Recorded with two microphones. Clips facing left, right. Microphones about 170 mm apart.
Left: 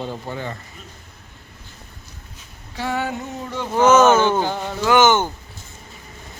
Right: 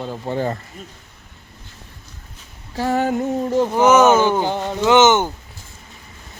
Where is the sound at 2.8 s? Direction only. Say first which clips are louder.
Right 6 dB; 45° right (ahead or behind).